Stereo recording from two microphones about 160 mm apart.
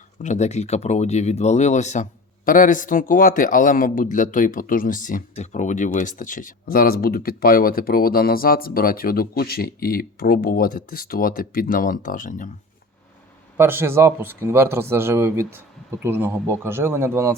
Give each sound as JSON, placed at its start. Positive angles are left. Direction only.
{"t": 0.2, "sound": "speech", "side_deg": 45}
{"t": 13.6, "sound": "speech", "side_deg": -15}